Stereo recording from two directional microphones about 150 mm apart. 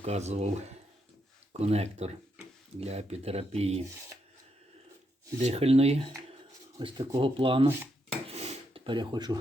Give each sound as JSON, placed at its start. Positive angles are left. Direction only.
{"t": 0.0, "sound": "speech", "side_deg": -45}
{"t": 5.4, "sound": "speech", "side_deg": -45}
{"t": 6.7, "sound": "speech", "side_deg": -30}
{"t": 8.3, "sound": "a sound", "side_deg": -45}